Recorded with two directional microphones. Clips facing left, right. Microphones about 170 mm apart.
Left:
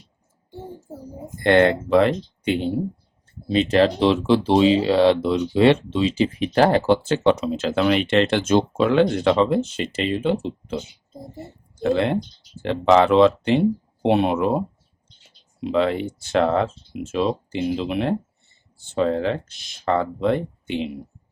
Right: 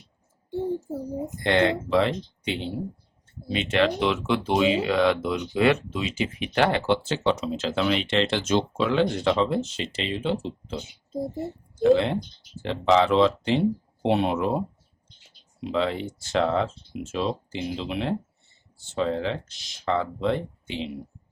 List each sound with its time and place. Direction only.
1.4 s speech: 55° left (ahead or behind)
3.5 s speech: 35° left (ahead or behind); by 10.8 s 55° left (ahead or behind)
11.8 s speech: 60° left (ahead or behind)
15.6 s speech: 60° left (ahead or behind)